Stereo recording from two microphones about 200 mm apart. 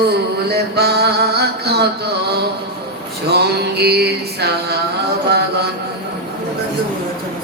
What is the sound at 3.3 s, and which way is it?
Music, 55° right (ahead or behind).